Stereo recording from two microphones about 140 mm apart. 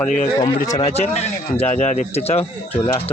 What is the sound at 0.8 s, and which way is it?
Speech, 50° left (ahead or behind).